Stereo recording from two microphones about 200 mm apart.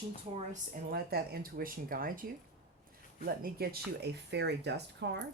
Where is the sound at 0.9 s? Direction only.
50° right (ahead or behind).